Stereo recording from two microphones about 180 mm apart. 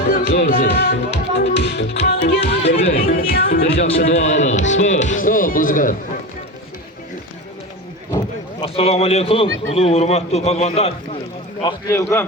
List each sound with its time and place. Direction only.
0.0 s music: 45° left (ahead or behind); by 2.4 s 70° left (ahead or behind)
2.4 s music: 35° left (ahead or behind)
2.9 s music: 50° left (ahead or behind)
3.8 s speech: 40° left (ahead or behind)
8.6 s a man's voice: 35° left (ahead or behind)
11.6 s a man's voice: 15° left (ahead or behind)